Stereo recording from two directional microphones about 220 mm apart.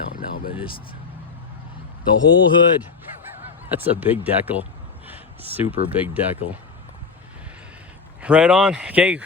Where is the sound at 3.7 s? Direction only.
10° right (ahead or behind).